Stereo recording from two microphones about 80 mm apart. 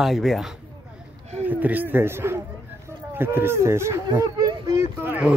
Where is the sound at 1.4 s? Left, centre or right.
Right.